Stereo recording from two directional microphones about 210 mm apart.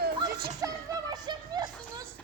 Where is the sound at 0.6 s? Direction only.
20° right (ahead or behind).